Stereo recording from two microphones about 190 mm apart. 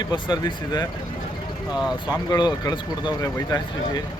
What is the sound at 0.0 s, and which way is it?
Speech, 25° left (ahead or behind).